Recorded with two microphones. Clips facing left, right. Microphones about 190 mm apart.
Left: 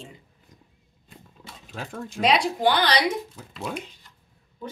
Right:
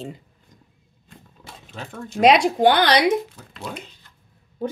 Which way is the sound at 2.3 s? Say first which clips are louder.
Right 7 dB; 80° right.